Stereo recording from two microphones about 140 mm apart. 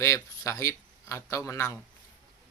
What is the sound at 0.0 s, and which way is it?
Speech, 20° left (ahead or behind).